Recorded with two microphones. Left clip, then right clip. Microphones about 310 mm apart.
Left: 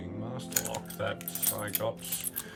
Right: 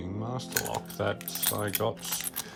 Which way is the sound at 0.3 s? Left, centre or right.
Centre.